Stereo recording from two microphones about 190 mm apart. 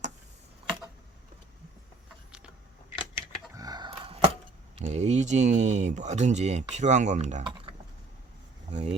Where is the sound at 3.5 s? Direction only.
20° right (ahead or behind).